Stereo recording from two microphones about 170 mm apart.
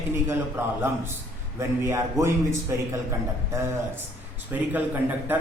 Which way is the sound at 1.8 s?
15° right (ahead or behind).